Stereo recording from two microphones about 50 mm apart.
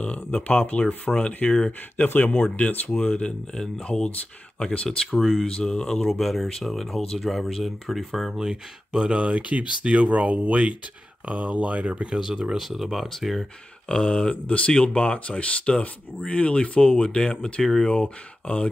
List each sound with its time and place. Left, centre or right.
0.0 s speech: left
2.1 s speech: left; by 5.5 s centre
5.5 s speech: centre
9.1 s speech: right; by 13.5 s centre
13.8 s speech: centre